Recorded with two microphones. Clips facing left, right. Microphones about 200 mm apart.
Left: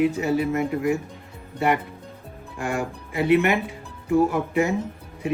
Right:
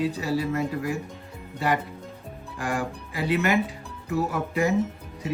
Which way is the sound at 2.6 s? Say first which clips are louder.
Left 2 dB; 25° left (ahead or behind).